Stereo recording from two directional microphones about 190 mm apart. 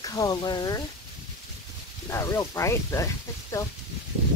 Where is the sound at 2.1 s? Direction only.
15° left (ahead or behind).